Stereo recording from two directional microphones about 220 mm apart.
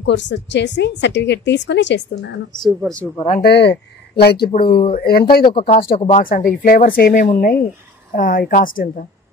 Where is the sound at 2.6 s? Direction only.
5° left (ahead or behind).